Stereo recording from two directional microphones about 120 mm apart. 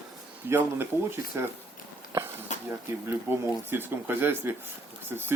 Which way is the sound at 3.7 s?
20° right (ahead or behind).